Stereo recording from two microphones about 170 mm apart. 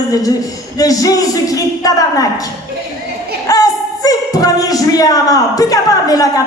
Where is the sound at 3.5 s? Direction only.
20° left (ahead or behind).